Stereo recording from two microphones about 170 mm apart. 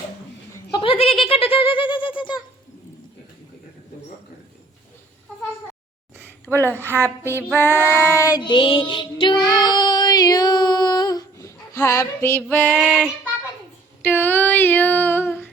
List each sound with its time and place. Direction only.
0.7 s a sound: 30° left (ahead or behind)
6.5 s speech: 5° right (ahead or behind)
6.9 s female singing: 10° right (ahead or behind)
7.6 s child singing: 10° left (ahead or behind)
12.7 s child singing: 5° right (ahead or behind)
14.0 s female singing: 10° left (ahead or behind)